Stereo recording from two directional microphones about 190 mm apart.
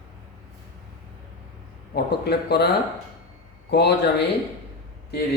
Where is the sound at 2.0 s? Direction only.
60° left (ahead or behind).